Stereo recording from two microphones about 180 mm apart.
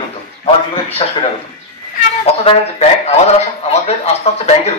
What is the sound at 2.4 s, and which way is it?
A man's voice, 35° left (ahead or behind).